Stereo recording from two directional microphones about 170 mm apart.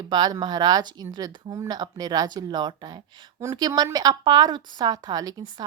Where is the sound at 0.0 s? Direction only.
25° right (ahead or behind).